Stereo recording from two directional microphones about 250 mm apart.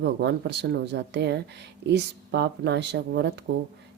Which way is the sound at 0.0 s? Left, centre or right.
Right.